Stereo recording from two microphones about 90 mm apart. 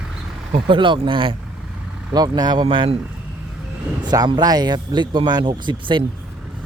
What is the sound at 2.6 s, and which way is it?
Speech, 70° right (ahead or behind).